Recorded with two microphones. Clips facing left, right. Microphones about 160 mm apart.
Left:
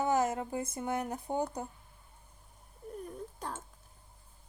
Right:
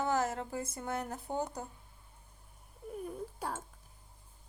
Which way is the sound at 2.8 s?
5° right (ahead or behind).